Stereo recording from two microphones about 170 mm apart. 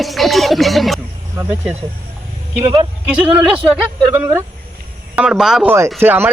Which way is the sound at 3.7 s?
10° right (ahead or behind).